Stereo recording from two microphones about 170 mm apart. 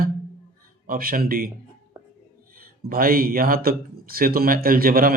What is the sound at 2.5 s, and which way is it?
A man's voice, 60° right (ahead or behind).